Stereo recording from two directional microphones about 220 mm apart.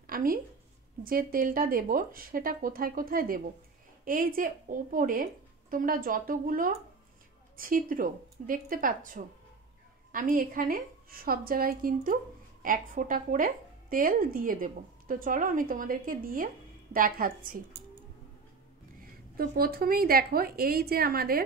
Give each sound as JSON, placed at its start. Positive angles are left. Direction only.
{"t": 0.0, "sound": "a sound", "side_deg": -40}
{"t": 1.0, "sound": "speech", "side_deg": -40}
{"t": 18.9, "sound": "a woman's voice", "side_deg": -40}